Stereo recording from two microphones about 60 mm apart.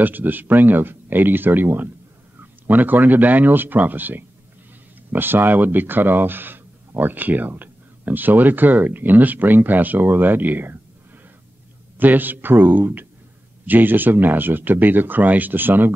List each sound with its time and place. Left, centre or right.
0.0 s speech: right
12.0 s speech: right